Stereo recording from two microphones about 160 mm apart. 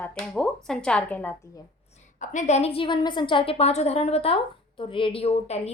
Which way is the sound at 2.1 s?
50° left (ahead or behind).